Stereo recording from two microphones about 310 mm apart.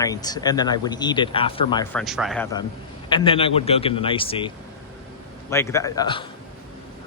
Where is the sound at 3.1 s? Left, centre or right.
Centre.